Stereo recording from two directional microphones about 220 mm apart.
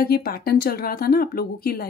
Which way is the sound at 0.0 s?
45° left (ahead or behind).